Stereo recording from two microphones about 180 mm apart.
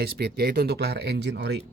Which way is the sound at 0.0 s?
60° right (ahead or behind).